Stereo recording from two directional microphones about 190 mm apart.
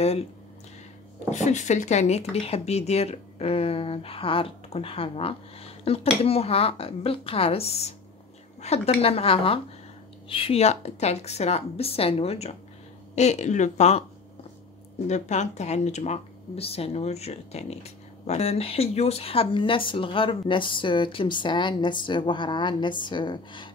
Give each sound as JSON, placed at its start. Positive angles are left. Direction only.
{"t": 1.3, "sound": "speech", "side_deg": 40}
{"t": 15.0, "sound": "speech", "side_deg": 40}